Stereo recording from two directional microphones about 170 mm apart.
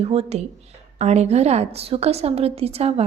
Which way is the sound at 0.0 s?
35° right (ahead or behind).